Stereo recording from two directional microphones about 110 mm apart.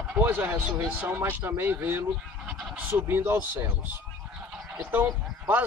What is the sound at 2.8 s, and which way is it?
Speech, 20° right (ahead or behind).